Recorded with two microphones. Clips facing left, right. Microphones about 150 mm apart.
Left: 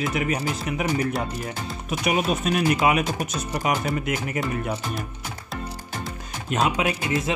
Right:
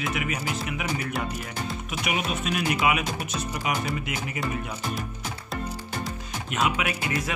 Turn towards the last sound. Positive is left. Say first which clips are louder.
# left 3 dB
turn(degrees=35)  # may be behind; listen again after turning